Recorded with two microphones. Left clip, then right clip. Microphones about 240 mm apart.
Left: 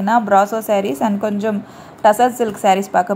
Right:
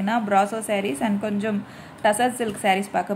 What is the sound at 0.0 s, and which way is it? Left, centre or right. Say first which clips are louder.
A woman's voice: left 7 dB; centre.